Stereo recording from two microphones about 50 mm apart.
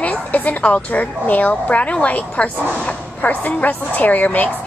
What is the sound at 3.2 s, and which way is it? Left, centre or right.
A woman's voice, left.